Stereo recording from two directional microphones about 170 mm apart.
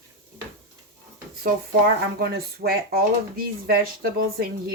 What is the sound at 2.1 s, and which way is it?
Speech, 65° right (ahead or behind).